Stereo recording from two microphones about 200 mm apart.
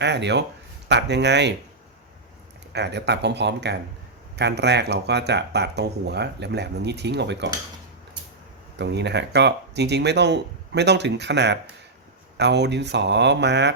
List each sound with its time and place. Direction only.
0.0 s speech: 60° right (ahead or behind)
2.7 s speech: 55° right (ahead or behind)
8.8 s speech: 60° right (ahead or behind)